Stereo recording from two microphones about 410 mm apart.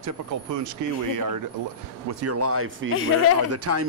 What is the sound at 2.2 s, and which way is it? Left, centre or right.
Speech, right.